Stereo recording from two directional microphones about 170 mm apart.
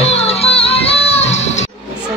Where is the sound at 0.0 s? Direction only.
40° left (ahead or behind).